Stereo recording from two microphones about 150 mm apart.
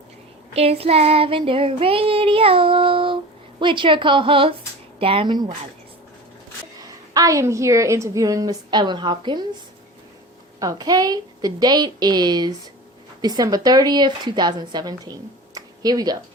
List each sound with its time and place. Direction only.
0.5 s child singing: 40° right (ahead or behind)
7.1 s a woman's voice: 20° right (ahead or behind)
10.6 s a woman's voice: 25° right (ahead or behind)
15.5 s a sound: 25° right (ahead or behind)